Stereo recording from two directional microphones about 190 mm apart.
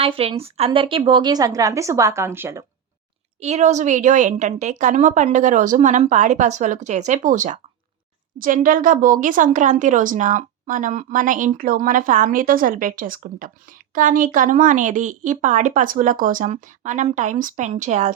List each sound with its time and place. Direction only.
0.0 s a woman's voice: 30° right (ahead or behind); by 2.6 s 15° right (ahead or behind)
3.4 s a woman's voice: 35° right (ahead or behind)